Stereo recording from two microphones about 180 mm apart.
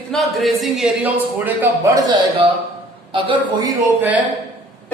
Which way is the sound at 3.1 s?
25° right (ahead or behind).